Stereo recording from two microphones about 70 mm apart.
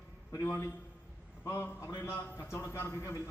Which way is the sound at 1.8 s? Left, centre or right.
Left.